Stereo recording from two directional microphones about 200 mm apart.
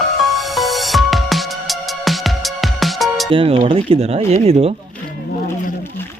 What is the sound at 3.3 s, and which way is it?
Speech, 25° right (ahead or behind).